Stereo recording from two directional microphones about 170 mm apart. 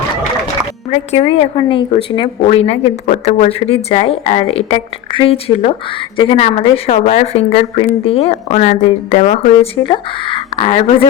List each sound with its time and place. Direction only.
0.9 s speech: 40° left (ahead or behind)
9.8 s speech: 30° left (ahead or behind)